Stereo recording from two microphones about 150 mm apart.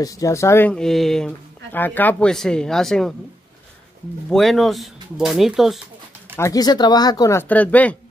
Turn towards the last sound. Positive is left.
turn(degrees=10)  # may be behind; listen again after turning